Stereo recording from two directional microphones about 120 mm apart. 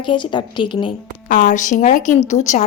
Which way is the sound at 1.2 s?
90° left.